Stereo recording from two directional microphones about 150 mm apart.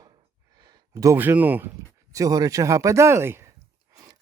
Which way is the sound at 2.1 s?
25° right (ahead or behind).